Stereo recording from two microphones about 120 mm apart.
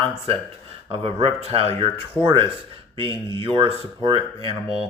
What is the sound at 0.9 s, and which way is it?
Speech, 55° right (ahead or behind).